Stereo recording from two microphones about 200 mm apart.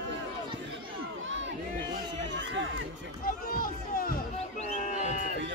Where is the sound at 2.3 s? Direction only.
65° right (ahead or behind).